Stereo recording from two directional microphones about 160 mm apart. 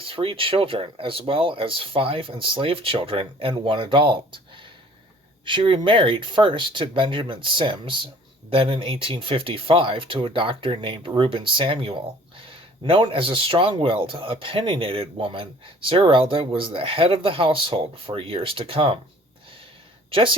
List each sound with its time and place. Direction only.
0.0 s speech: 35° right (ahead or behind)
20.1 s speech: 35° right (ahead or behind)